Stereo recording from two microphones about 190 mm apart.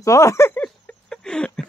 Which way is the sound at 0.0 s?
15° left (ahead or behind).